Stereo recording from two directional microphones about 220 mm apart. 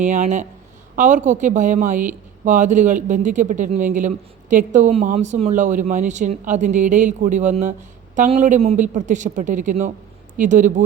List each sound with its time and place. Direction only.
0.0 s a man's voice: 35° right (ahead or behind)